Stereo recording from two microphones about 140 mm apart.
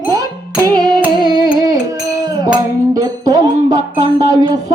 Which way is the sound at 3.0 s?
30° right (ahead or behind).